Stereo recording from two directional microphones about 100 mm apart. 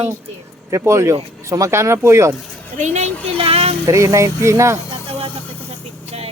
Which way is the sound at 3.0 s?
75° right (ahead or behind).